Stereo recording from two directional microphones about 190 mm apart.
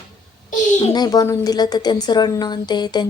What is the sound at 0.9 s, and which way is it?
A woman's voice, 20° left (ahead or behind).